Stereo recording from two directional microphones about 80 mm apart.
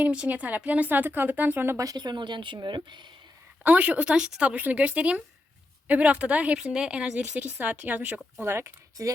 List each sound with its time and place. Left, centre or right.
0.0 s speech: centre
2.0 s speech: right
3.6 s a woman's voice: centre